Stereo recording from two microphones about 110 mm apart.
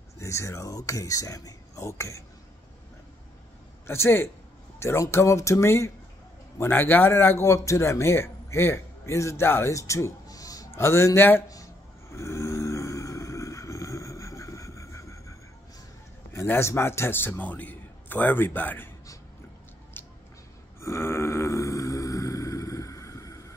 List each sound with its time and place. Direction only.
0.2 s a man's voice: 25° left (ahead or behind)
3.8 s a man's voice: 25° left (ahead or behind)
12.1 s a sound: 25° left (ahead or behind)
16.3 s a man's voice: 20° left (ahead or behind)
20.8 s vehicle: 25° left (ahead or behind)